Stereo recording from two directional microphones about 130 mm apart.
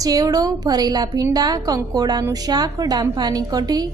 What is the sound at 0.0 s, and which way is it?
A woman's voice, 30° right (ahead or behind).